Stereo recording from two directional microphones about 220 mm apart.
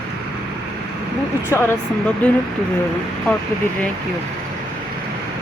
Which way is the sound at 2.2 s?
5° left (ahead or behind).